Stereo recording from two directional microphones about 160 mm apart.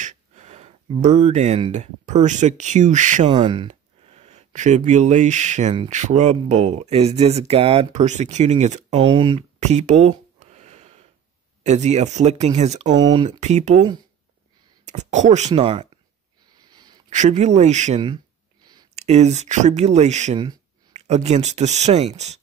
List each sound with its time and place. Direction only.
0.0 s a sound: 45° right (ahead or behind)
1.7 s speech: 50° right (ahead or behind)
3.3 s speech: 30° right (ahead or behind)
9.6 s a sound: 45° right (ahead or behind)
11.6 s speech: 45° right (ahead or behind)
12.9 s speech: 25° right (ahead or behind)
13.4 s speech: 45° right (ahead or behind)
14.9 s speech: 45° right (ahead or behind)
16.5 s a sound: 25° right (ahead or behind)
17.1 s speech: 45° right (ahead or behind)
18.0 s a sound: 25° right (ahead or behind)
18.9 s speech: 45° right (ahead or behind)